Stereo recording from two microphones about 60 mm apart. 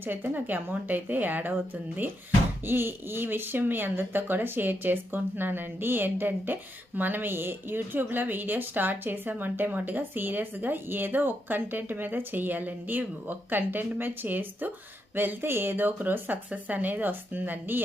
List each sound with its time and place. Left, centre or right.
0.0 s speech: right